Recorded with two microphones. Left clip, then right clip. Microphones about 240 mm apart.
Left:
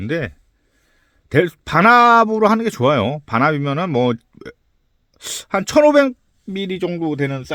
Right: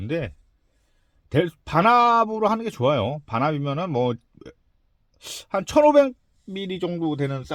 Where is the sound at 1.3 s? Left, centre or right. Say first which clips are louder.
Left 6 dB; left.